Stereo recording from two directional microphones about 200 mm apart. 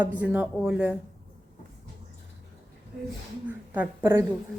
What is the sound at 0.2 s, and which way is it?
Speech, 5° right (ahead or behind).